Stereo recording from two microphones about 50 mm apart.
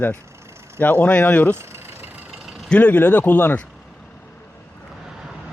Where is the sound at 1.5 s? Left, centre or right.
Right.